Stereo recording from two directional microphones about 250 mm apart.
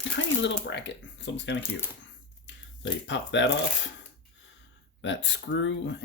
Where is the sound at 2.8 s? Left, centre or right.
Left.